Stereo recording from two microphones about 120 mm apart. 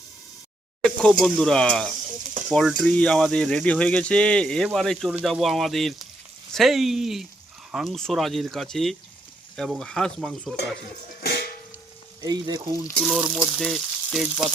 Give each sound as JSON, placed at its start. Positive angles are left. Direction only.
{"t": 0.9, "sound": "speech", "side_deg": 5}
{"t": 12.2, "sound": "speech", "side_deg": -35}
{"t": 13.0, "sound": "speech", "side_deg": 0}
{"t": 13.5, "sound": "frying", "side_deg": 0}